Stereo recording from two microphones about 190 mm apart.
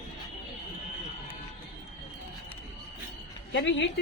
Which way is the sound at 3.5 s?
70° left (ahead or behind).